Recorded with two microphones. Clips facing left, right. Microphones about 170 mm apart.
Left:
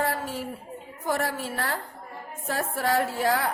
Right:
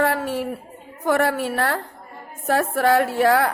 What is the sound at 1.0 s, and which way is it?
A woman's voice, 65° right (ahead or behind).